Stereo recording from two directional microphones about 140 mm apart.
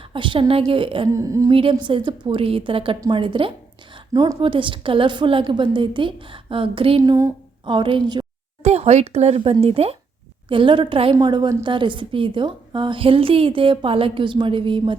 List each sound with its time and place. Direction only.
0.1 s a woman's voice: 35° right (ahead or behind)
1.1 s speech: 25° right (ahead or behind)
1.5 s a woman's voice: 40° right (ahead or behind)
7.0 s speech: 25° right (ahead or behind)
7.6 s a woman's voice: 35° right (ahead or behind)
8.6 s a woman's voice: 50° right (ahead or behind)